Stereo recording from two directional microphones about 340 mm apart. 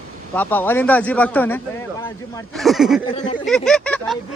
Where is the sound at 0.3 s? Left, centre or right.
Centre.